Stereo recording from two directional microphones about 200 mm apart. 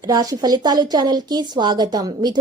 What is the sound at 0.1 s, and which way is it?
Speech, 20° right (ahead or behind).